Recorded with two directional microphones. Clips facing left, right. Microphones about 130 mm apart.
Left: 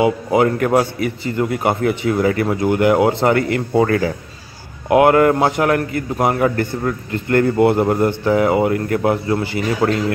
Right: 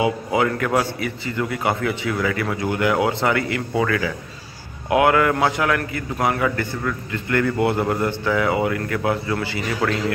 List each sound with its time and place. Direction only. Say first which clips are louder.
0.0 s speech: left 5 dB; 30° left (ahead or behind)